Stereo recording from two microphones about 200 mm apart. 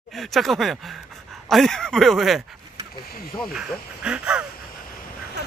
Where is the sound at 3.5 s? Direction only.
5° right (ahead or behind).